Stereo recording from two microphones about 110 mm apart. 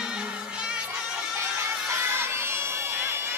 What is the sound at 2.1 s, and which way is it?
Crowd, 20° right (ahead or behind).